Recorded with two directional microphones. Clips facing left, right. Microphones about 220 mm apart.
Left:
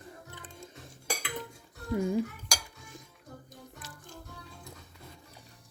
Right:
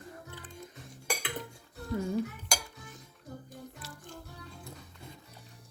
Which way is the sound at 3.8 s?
15° left (ahead or behind).